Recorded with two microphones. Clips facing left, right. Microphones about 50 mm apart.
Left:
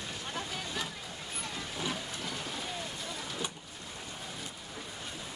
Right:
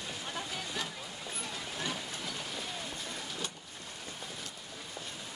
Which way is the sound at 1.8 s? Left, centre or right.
Centre.